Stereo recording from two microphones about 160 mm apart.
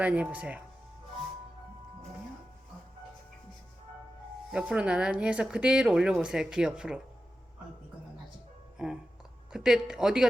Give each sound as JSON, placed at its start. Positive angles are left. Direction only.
{"t": 0.0, "sound": "speech", "side_deg": -10}
{"t": 4.5, "sound": "speech", "side_deg": -5}
{"t": 8.8, "sound": "music", "side_deg": -5}
{"t": 9.5, "sound": "speech", "side_deg": -5}